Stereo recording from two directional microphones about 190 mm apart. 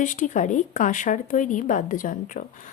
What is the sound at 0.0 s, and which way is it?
A woman's voice, 40° left (ahead or behind).